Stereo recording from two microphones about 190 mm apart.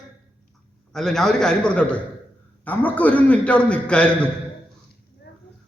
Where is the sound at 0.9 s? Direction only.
Centre (ahead or behind).